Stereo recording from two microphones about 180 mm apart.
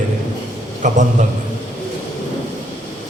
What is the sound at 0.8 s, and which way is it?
Speech, 45° right (ahead or behind).